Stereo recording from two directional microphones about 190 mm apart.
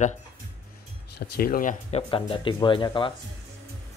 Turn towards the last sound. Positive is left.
turn(degrees=25)  # may be behind; listen again after turning